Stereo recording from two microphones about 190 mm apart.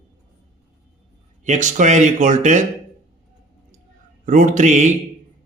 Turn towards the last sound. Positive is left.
turn(degrees=-40)  # may be behind; listen again after turning